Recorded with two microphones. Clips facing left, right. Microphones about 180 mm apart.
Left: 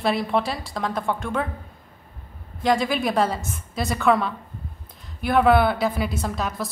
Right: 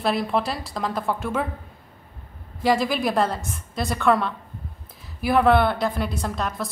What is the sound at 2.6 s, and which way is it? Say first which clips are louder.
A woman's voice: even; centre (ahead or behind).